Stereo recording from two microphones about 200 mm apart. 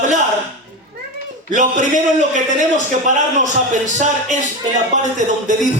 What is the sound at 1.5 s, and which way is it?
Speech, 40° right (ahead or behind).